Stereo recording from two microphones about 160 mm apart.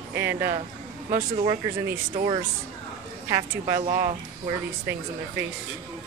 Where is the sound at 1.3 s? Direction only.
35° right (ahead or behind).